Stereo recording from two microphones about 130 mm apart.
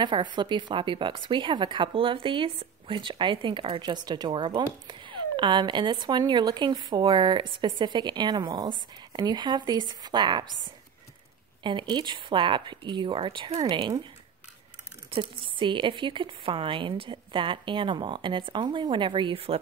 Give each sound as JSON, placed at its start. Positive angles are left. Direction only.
{"t": 0.0, "sound": "a woman's voice", "side_deg": -35}
{"t": 11.6, "sound": "a woman's voice", "side_deg": -35}
{"t": 15.0, "sound": "a woman's voice", "side_deg": -40}